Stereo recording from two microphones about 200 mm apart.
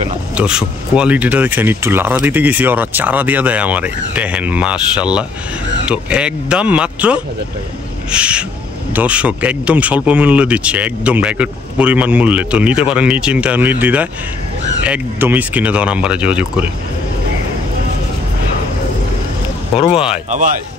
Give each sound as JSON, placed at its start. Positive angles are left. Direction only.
{"t": 0.4, "sound": "speech", "side_deg": -5}
{"t": 20.2, "sound": "speech", "side_deg": -40}